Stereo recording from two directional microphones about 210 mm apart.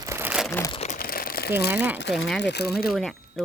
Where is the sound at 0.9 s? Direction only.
45° left (ahead or behind).